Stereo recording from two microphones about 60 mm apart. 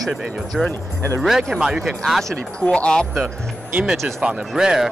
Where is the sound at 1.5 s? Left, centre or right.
Centre.